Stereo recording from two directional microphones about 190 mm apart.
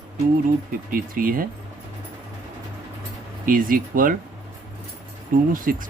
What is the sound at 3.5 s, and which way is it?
Speech, 45° right (ahead or behind).